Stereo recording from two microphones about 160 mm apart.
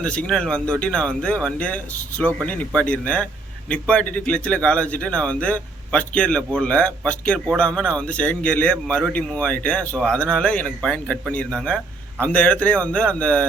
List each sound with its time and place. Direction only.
0.0 s a man's voice: 5° left (ahead or behind)